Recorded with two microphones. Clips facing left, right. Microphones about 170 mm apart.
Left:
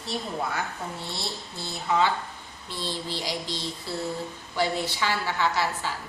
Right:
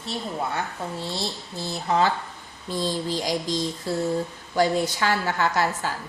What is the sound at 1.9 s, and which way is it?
A woman's voice, 40° right (ahead or behind).